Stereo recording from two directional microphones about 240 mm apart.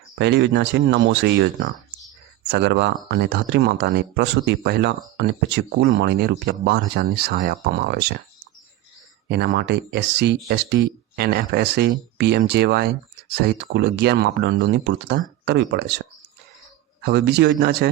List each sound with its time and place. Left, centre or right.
0.2 s speech: right
9.3 s speech: right